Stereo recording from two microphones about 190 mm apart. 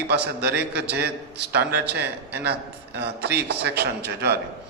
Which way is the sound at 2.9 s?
60° right (ahead or behind).